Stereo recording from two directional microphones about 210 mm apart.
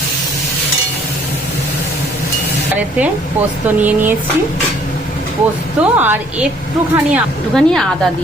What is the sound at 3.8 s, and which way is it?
Speech, 10° right (ahead or behind).